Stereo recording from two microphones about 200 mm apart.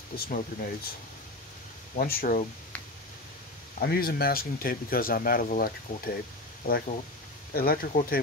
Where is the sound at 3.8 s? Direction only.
50° left (ahead or behind).